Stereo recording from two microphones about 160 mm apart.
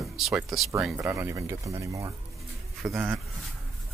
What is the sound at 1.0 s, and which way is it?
Speech, 15° right (ahead or behind).